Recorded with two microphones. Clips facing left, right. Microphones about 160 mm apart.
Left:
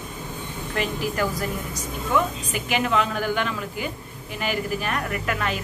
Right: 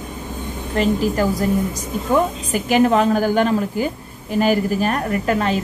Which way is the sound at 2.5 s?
40° right (ahead or behind).